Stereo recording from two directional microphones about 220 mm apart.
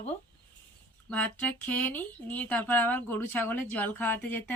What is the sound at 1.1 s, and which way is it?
Speech, 5° left (ahead or behind).